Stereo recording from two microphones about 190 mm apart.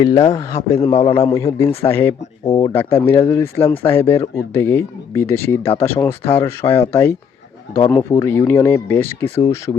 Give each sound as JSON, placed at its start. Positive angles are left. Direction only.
{"t": 0.0, "sound": "a man's voice", "side_deg": 20}
{"t": 7.9, "sound": "a man's voice", "side_deg": 15}